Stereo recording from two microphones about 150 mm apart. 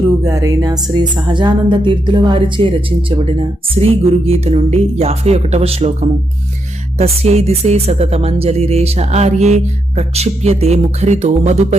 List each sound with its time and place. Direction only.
0.3 s speech: 25° right (ahead or behind)
3.8 s speech: 40° right (ahead or behind)